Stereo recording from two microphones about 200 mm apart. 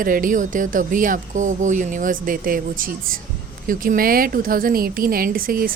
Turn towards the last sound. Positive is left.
turn(degrees=-45)  # may be behind; listen again after turning